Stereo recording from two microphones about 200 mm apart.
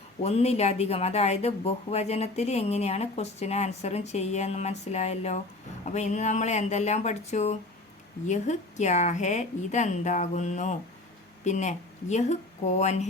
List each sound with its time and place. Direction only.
0.2 s speech: 30° left (ahead or behind)